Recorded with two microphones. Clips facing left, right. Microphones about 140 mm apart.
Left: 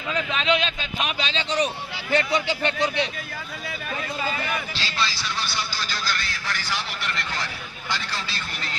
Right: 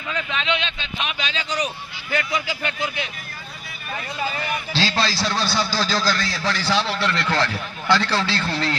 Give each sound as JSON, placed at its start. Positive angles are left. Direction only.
{"t": 0.3, "sound": "a man's voice", "side_deg": 40}
{"t": 4.8, "sound": "a man's voice", "side_deg": -90}